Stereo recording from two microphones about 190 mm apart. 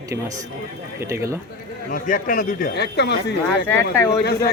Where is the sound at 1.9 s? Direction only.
45° left (ahead or behind).